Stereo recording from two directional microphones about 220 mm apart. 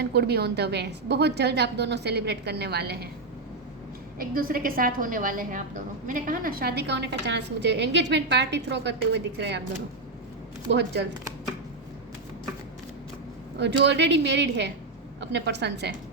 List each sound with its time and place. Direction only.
0.0 s a woman's voice: 50° right (ahead or behind)
4.2 s a woman's voice: 40° right (ahead or behind)
10.7 s a woman's voice: 50° right (ahead or behind)
13.6 s a woman's voice: 50° right (ahead or behind)